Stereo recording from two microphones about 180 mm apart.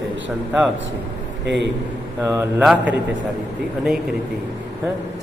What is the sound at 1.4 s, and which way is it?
Speech, 75° right (ahead or behind).